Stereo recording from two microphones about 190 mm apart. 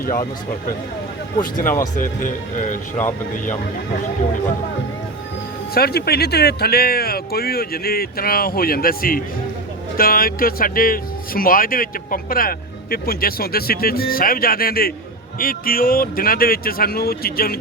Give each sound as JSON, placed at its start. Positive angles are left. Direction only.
{"t": 1.4, "sound": "speech", "side_deg": 45}
{"t": 5.7, "sound": "speech", "side_deg": 55}